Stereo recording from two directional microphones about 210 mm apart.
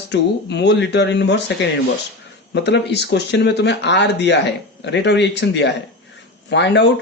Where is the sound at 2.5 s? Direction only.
55° left (ahead or behind).